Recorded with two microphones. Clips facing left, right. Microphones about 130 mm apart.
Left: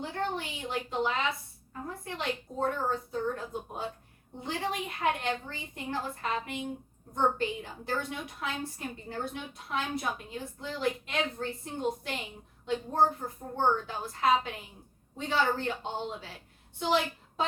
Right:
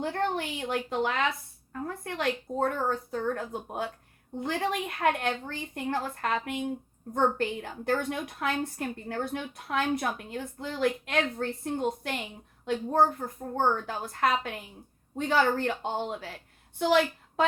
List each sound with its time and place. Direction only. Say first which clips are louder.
0.0 s a woman's voice: right 4 dB; 55° right (ahead or behind)
13.1 s a woman's voice: right 3 dB; 55° right (ahead or behind)